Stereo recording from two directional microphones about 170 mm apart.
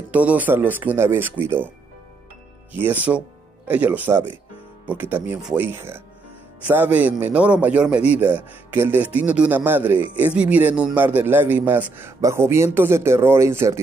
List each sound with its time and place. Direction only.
0.1 s a man's voice: 10° right (ahead or behind)
2.7 s a man's voice: 10° right (ahead or behind)